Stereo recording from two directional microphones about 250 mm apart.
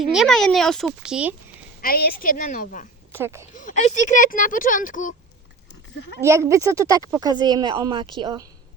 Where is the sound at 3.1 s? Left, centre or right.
Centre.